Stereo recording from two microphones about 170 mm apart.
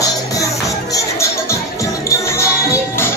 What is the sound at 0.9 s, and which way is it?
Music, 15° left (ahead or behind).